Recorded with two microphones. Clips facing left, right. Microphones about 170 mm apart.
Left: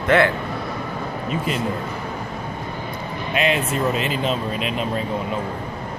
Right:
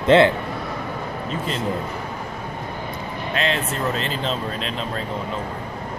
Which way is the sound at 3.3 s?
15° left (ahead or behind).